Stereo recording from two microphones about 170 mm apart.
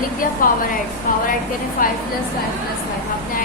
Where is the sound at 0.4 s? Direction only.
55° left (ahead or behind).